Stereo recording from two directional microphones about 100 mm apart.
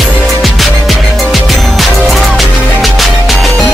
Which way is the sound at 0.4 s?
Centre (ahead or behind).